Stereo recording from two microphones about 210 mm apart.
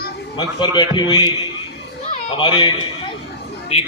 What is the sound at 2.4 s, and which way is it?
Speech, 20° left (ahead or behind).